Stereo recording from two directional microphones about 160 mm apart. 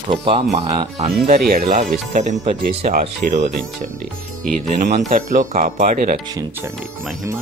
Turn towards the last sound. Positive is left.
turn(degrees=-55)  # may be behind; listen again after turning